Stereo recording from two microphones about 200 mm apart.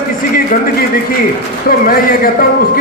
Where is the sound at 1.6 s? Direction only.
45° left (ahead or behind).